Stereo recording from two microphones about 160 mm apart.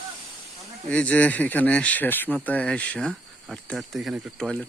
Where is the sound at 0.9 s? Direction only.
5° left (ahead or behind).